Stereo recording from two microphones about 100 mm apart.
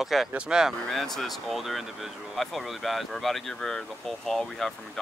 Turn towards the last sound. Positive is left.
turn(degrees=5)  # may be behind; listen again after turning